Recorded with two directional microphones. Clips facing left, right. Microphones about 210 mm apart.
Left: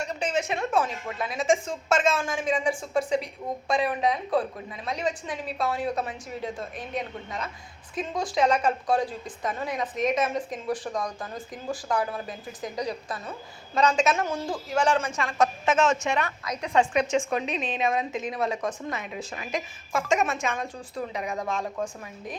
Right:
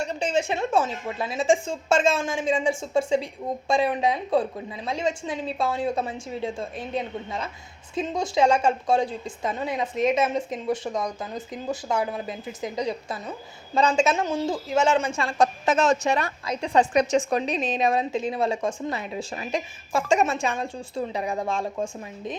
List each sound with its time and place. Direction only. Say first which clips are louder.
0.0 s a woman's voice: right 3 dB; 30° right (ahead or behind)